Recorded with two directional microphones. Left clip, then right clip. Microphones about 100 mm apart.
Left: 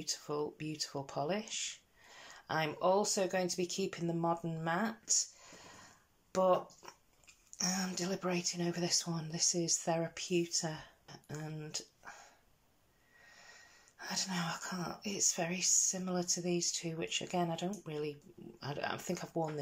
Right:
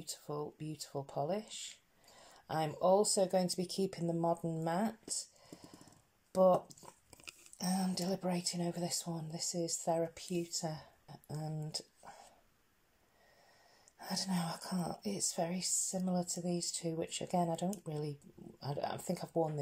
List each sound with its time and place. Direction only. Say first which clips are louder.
0.0 s speech: left 4 dB; 40° right (ahead or behind); by 12.2 s 60° right (ahead or behind)
13.9 s speech: left 2 dB; 70° right (ahead or behind); by 19.6 s 55° right (ahead or behind)